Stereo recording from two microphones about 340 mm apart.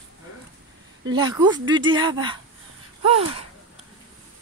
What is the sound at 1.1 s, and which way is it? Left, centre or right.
Speech, centre.